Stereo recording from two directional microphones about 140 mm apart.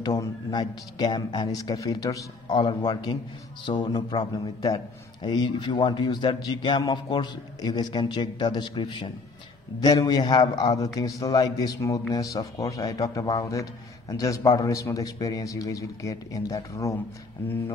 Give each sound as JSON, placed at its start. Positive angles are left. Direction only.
{"t": 0.0, "sound": "a man's voice", "side_deg": 30}